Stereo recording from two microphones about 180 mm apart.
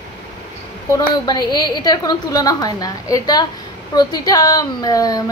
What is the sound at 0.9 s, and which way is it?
A woman's voice, 20° left (ahead or behind).